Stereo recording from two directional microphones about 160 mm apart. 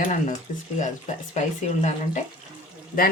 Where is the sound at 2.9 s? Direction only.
60° left (ahead or behind).